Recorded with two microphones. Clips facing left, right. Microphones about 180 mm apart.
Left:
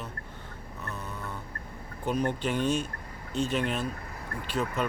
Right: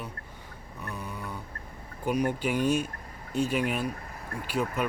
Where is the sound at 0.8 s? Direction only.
10° right (ahead or behind).